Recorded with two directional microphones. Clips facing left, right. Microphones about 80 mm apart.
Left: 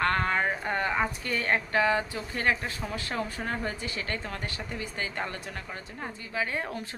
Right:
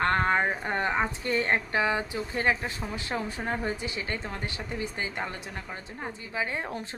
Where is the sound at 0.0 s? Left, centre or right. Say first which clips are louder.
Right 2 dB; right.